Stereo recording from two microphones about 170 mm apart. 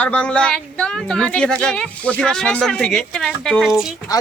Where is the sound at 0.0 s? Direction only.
5° left (ahead or behind).